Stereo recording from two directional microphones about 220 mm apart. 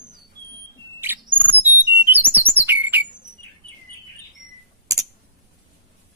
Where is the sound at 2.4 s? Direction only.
10° right (ahead or behind).